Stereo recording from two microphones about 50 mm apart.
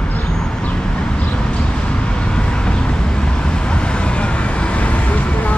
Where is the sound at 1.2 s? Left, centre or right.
Left.